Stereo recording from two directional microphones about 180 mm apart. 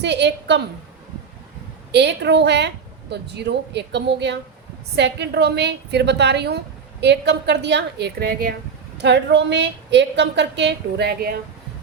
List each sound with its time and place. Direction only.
0.0 s a woman's voice: 70° right (ahead or behind)
1.9 s a woman's voice: 70° right (ahead or behind); by 8.5 s 55° right (ahead or behind)
9.0 s a woman's voice: 75° right (ahead or behind)